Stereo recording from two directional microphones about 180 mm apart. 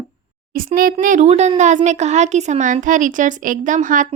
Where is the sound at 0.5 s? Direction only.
50° right (ahead or behind).